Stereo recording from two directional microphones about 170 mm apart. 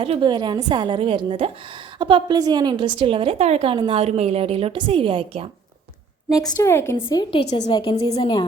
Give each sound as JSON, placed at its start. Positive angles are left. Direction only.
{"t": 0.0, "sound": "a woman's voice", "side_deg": -30}
{"t": 6.2, "sound": "a woman's voice", "side_deg": 0}
{"t": 6.6, "sound": "a woman's voice", "side_deg": 15}
{"t": 6.9, "sound": "a woman's voice", "side_deg": 25}